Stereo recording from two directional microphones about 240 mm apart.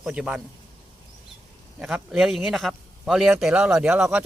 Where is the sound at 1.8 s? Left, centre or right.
Centre.